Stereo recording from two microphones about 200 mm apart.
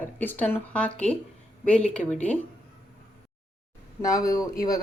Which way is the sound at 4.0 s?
15° left (ahead or behind).